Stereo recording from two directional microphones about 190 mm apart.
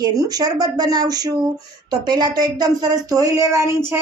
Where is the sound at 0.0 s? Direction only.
20° right (ahead or behind).